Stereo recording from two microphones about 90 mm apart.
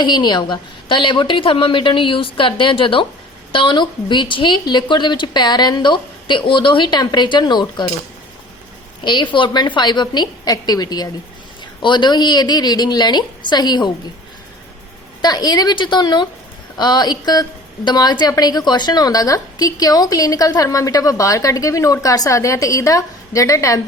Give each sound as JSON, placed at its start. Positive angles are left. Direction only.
{"t": 0.0, "sound": "a woman's voice", "side_deg": 55}
{"t": 3.5, "sound": "a woman's voice", "side_deg": 65}
{"t": 9.0, "sound": "a woman's voice", "side_deg": 60}
{"t": 11.8, "sound": "a woman's voice", "side_deg": 60}
{"t": 15.2, "sound": "a woman's voice", "side_deg": 50}